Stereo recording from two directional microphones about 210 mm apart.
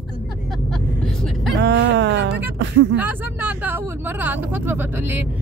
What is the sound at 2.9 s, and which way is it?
Speech, 10° right (ahead or behind).